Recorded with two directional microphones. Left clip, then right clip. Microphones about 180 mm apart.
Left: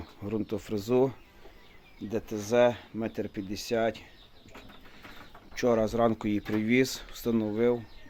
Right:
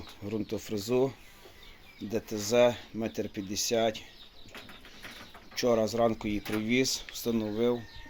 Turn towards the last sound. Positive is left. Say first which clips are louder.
# left 2 dB
turn(degrees=20)  # may be behind; listen again after turning